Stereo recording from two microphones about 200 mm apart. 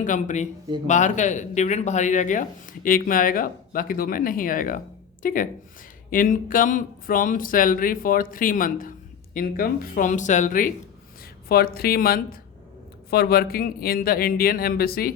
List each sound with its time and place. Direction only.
0.0 s speech: 40° left (ahead or behind)